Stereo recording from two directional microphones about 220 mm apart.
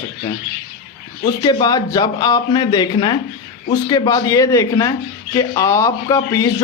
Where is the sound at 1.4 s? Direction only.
20° left (ahead or behind).